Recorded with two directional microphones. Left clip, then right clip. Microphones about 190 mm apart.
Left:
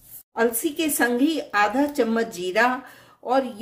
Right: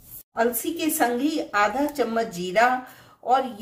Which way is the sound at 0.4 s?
45° left (ahead or behind).